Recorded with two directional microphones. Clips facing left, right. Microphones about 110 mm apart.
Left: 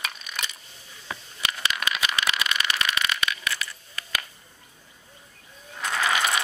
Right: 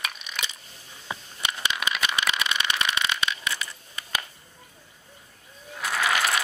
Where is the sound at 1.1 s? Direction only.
20° right (ahead or behind).